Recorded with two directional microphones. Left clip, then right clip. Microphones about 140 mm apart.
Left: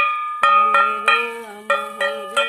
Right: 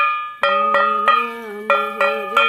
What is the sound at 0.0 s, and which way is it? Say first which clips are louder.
Music: left 1 dB; 5° left (ahead or behind).